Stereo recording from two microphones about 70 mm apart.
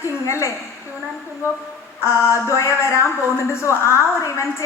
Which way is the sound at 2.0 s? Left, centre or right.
Left.